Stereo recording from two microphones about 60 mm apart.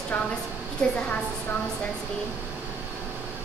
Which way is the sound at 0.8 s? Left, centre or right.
Centre.